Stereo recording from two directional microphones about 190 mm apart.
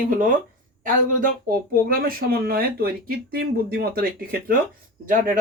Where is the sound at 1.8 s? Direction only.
50° right (ahead or behind).